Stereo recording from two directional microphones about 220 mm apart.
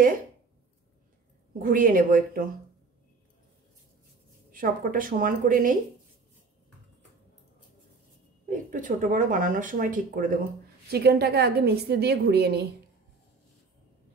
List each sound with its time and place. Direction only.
1.6 s speech: 40° right (ahead or behind)
4.5 s speech: 40° right (ahead or behind)
8.5 s a woman's voice: 35° right (ahead or behind)